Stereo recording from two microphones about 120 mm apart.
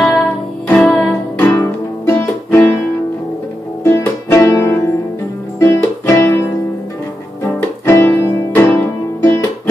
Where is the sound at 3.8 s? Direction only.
20° left (ahead or behind).